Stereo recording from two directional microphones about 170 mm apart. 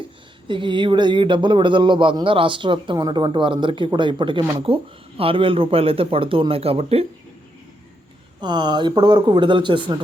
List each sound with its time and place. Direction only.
0.4 s speech: 30° right (ahead or behind)
8.4 s speech: 25° right (ahead or behind)